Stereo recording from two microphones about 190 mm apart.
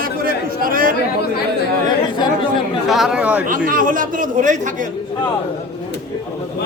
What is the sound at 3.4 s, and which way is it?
Speech, 45° right (ahead or behind).